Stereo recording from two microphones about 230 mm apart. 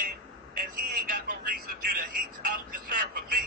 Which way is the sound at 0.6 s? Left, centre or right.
Right.